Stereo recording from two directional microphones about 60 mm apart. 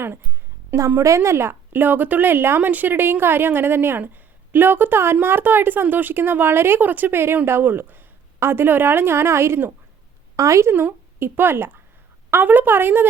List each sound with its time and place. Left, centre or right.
0.9 s a woman's voice: right
10.3 s speech: right
11.2 s a woman's voice: right